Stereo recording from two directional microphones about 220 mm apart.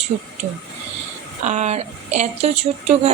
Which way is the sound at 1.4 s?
30° right (ahead or behind).